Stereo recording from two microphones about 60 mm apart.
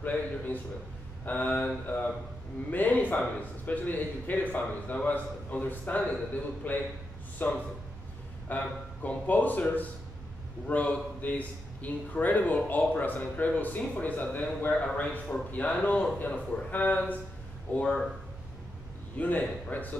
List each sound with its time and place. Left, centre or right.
0.0 s a man's voice: left
2.7 s a man's voice: left
19.1 s a man's voice: left